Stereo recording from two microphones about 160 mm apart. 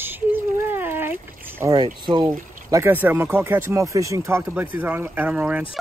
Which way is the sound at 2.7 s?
15° right (ahead or behind).